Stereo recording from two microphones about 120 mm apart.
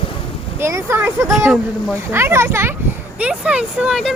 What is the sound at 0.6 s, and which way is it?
Speech, 25° right (ahead or behind).